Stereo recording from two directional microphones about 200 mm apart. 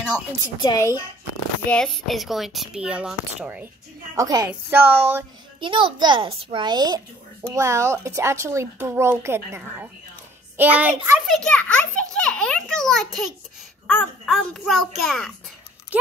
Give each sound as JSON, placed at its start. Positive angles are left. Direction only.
{"t": 0.1, "sound": "a woman's voice", "side_deg": 20}
{"t": 1.7, "sound": "speech", "side_deg": 0}
{"t": 4.1, "sound": "speech", "side_deg": -15}
{"t": 5.6, "sound": "a child's voice", "side_deg": -25}
{"t": 15.9, "sound": "horse", "side_deg": -5}